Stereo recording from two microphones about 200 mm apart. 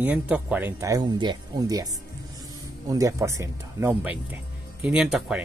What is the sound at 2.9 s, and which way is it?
Speech, 15° right (ahead or behind).